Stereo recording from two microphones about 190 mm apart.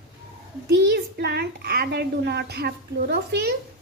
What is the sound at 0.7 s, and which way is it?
A child's voice, 60° right (ahead or behind).